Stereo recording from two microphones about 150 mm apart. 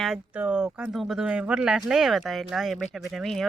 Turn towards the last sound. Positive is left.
turn(degrees=0)  # may be behind; listen again after turning